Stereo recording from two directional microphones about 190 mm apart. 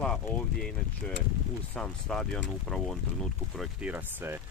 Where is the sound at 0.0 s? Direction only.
5° left (ahead or behind).